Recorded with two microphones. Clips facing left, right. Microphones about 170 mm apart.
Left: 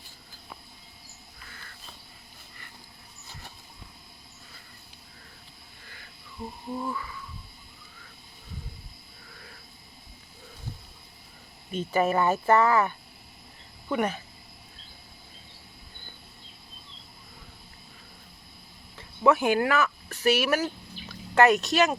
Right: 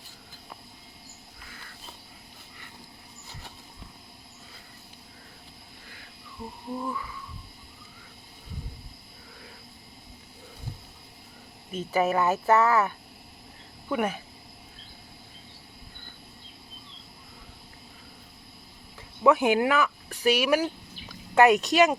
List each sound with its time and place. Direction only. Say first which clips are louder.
6.7 s speech: even; centre (ahead or behind)
11.7 s speech: even; centre (ahead or behind)
18.9 s speech: right 1 dB; 15° right (ahead or behind)